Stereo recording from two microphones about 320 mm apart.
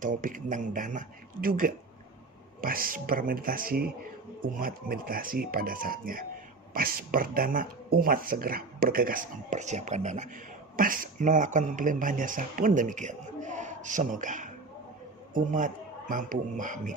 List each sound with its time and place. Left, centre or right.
0.0 s a man's voice: right